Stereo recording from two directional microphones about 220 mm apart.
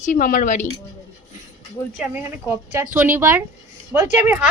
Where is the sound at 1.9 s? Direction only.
5° right (ahead or behind).